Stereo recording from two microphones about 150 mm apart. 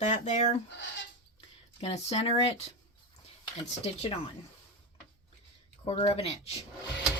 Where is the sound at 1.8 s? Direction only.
45° left (ahead or behind).